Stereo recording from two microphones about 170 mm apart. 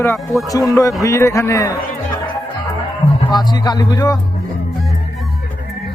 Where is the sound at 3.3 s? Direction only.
25° left (ahead or behind).